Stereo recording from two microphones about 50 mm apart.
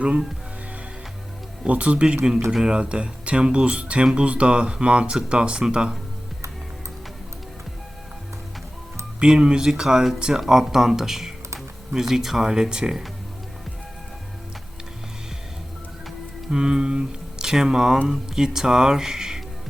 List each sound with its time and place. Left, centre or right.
1.6 s speech: right
2.5 s speech: centre
9.2 s speech: centre
16.5 s speech: centre